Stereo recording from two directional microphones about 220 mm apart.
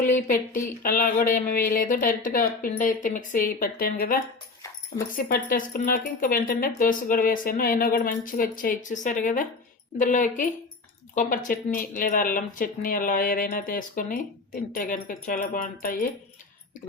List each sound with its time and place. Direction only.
0.0 s speech: 35° left (ahead or behind)